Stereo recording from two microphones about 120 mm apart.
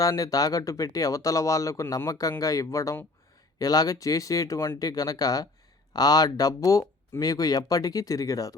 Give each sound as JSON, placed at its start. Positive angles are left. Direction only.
{"t": 0.0, "sound": "speech", "side_deg": 30}